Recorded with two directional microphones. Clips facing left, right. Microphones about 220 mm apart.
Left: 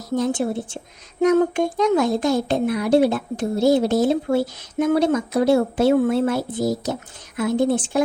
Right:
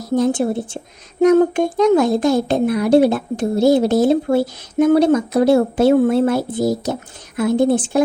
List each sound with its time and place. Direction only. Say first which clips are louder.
0.2 s speech: right 4 dB; 35° right (ahead or behind)